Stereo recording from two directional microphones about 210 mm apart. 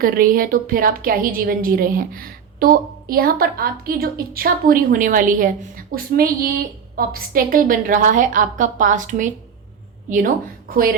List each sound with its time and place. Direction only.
0.0 s a woman's voice: 40° right (ahead or behind)